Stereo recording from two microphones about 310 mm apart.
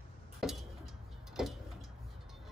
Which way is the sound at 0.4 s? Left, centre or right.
Centre.